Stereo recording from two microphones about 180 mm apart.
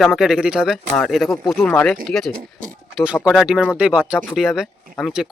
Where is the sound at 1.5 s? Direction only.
10° left (ahead or behind).